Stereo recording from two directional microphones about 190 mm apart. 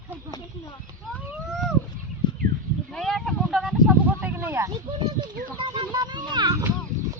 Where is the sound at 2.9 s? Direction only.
Centre (ahead or behind); by 6.7 s 20° right (ahead or behind).